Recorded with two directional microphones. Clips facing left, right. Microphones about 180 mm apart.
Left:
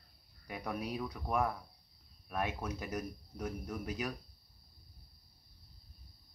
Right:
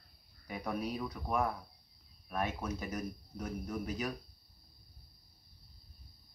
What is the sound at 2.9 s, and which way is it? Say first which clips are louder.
A man's voice: even; centre (ahead or behind).